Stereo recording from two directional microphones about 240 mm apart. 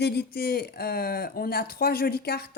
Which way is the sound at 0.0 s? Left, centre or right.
Left.